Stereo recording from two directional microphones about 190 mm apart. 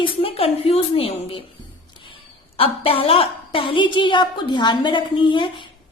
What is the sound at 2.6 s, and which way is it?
A woman's voice, 30° left (ahead or behind).